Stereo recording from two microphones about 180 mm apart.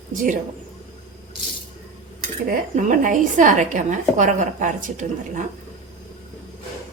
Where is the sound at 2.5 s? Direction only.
45° right (ahead or behind).